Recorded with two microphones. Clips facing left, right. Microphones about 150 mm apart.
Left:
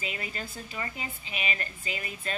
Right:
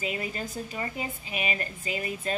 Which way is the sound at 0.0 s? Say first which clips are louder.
Right 5 dB; 35° right (ahead or behind).